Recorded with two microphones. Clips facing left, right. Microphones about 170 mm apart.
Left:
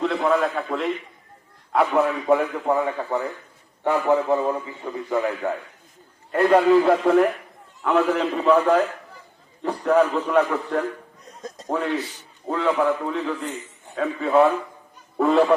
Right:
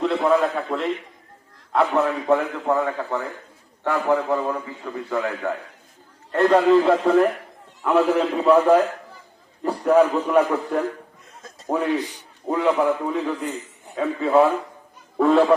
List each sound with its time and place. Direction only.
0.0 s a man's voice: centre (ahead or behind)